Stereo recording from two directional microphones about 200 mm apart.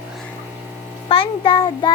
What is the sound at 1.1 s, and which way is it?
Speech, 25° left (ahead or behind).